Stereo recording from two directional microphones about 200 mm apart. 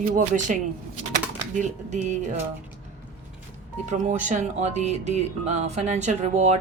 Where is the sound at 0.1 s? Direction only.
40° right (ahead or behind).